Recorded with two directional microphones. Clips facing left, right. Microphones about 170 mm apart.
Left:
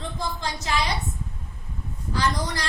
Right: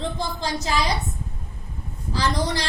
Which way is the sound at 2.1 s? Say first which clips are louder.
Right 2 dB; 30° right (ahead or behind).